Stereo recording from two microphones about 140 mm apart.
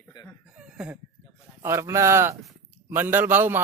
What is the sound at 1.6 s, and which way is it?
A man's voice, 20° right (ahead or behind).